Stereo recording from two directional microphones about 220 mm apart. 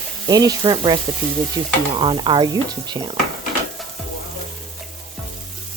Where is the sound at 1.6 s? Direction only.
15° right (ahead or behind).